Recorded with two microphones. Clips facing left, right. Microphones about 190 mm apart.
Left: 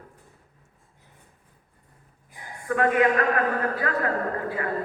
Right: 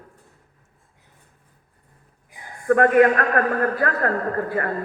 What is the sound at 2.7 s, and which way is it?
A man's voice, 50° right (ahead or behind).